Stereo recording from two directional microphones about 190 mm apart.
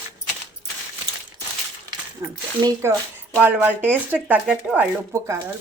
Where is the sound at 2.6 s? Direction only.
20° right (ahead or behind).